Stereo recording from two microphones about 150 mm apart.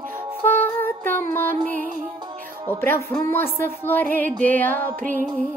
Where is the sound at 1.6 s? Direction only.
60° right (ahead or behind).